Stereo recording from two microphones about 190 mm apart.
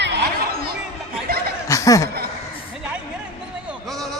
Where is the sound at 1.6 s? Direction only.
15° left (ahead or behind).